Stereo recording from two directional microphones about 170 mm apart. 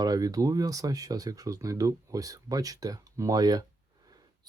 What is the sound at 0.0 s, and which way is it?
Speech, 20° right (ahead or behind).